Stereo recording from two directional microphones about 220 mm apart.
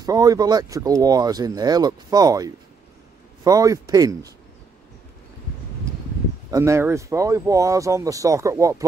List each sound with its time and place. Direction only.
0.0 s speech: 15° right (ahead or behind)
6.5 s speech: 15° right (ahead or behind)